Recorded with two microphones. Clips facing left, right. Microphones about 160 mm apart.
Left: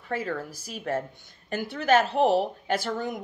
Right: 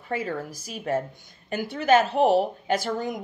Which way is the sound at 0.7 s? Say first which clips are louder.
Right 3 dB; 15° right (ahead or behind).